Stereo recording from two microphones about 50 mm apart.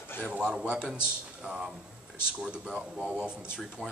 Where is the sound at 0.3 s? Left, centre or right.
Right.